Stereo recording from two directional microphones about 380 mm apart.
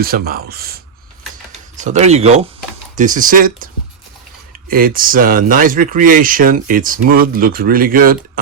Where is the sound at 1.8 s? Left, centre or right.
Centre.